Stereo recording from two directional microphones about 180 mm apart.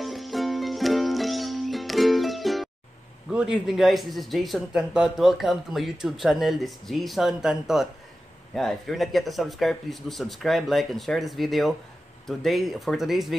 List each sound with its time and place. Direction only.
0.0 s music: centre (ahead or behind)
3.3 s speech: 5° right (ahead or behind)